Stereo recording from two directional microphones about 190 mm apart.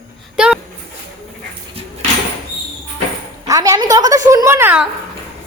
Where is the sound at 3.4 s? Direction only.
20° right (ahead or behind).